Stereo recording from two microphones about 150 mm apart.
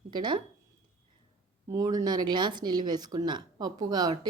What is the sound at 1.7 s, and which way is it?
Speech, 25° right (ahead or behind).